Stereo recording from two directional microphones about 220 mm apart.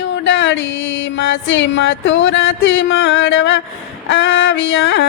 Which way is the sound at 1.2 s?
55° left (ahead or behind).